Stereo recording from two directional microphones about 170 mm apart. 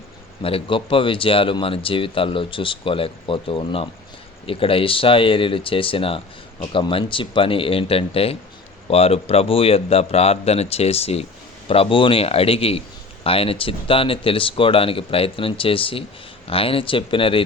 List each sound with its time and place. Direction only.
0.4 s speech: 30° left (ahead or behind)